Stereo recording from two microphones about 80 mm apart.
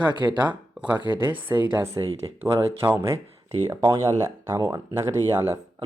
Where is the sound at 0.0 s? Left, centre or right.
Right.